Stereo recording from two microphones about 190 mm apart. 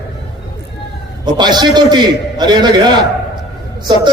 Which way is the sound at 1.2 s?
25° right (ahead or behind).